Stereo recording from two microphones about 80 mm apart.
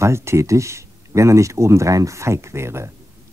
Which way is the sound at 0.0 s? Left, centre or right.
Right.